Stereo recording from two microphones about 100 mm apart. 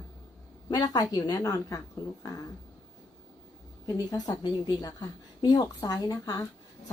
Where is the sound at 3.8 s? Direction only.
35° left (ahead or behind).